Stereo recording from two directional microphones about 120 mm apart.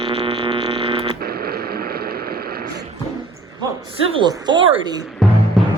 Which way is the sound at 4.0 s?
50° right (ahead or behind).